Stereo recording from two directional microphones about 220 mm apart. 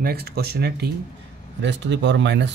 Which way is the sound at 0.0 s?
45° right (ahead or behind).